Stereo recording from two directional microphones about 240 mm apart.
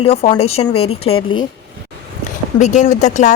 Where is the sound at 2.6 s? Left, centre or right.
Left.